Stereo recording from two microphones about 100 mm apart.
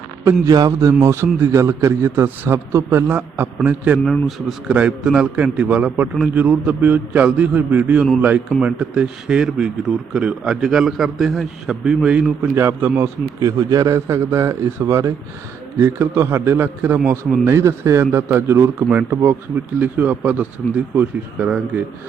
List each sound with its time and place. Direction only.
0.4 s a man's voice: 40° right (ahead or behind); by 3.9 s 20° right (ahead or behind)
3.9 s a man's voice: centre (ahead or behind)
12.4 s a man's voice: 20° right (ahead or behind)
13.4 s a man's voice: 35° right (ahead or behind); by 21.5 s 15° right (ahead or behind)